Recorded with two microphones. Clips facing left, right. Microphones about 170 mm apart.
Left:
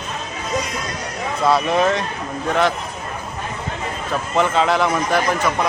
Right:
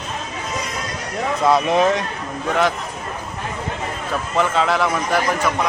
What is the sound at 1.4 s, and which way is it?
Speech, 15° right (ahead or behind).